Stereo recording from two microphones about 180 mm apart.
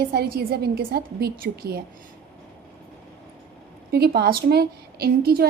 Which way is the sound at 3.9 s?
65° right (ahead or behind).